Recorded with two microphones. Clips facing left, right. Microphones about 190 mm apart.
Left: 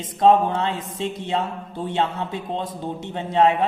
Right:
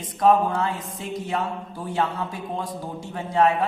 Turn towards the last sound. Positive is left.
turn(degrees=25)  # may be behind; listen again after turning